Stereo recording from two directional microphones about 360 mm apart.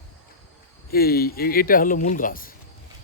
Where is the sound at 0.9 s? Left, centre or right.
Left.